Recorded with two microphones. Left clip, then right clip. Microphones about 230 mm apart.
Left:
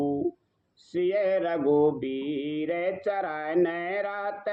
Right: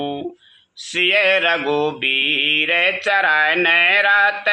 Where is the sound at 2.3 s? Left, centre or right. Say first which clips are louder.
Right 15 dB; right.